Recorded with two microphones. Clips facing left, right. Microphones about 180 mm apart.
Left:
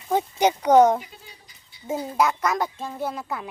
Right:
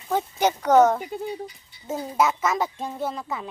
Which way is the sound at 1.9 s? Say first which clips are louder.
Even; centre (ahead or behind).